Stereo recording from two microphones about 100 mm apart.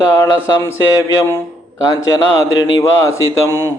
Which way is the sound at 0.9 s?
30° left (ahead or behind).